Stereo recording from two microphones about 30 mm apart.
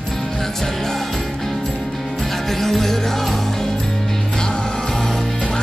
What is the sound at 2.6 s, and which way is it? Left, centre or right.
Music, centre.